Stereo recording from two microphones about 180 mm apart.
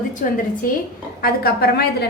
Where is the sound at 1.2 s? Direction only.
60° left (ahead or behind).